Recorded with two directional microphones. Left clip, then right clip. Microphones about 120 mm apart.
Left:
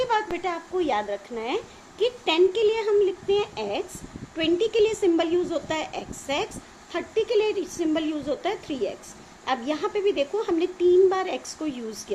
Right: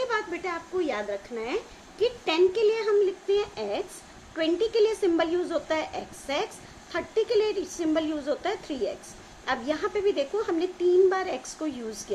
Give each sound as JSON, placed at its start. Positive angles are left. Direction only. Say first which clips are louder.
{"t": 0.1, "sound": "a woman's voice", "louder": "left 4 dB", "side_deg": 50}